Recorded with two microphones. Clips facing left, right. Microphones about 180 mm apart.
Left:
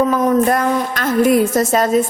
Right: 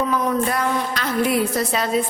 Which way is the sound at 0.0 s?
45° left (ahead or behind).